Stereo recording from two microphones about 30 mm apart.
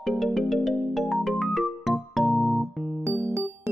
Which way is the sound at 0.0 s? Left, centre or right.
Centre.